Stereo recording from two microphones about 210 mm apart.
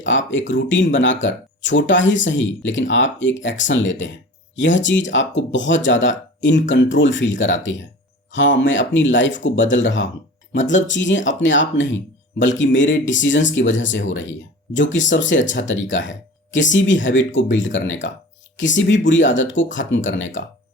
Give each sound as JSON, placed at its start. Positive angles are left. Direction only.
{"t": 0.0, "sound": "speech", "side_deg": 65}